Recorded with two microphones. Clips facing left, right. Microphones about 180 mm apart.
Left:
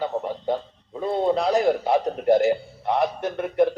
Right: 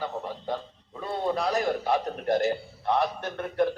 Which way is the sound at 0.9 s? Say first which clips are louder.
Left 6 dB; 20° left (ahead or behind).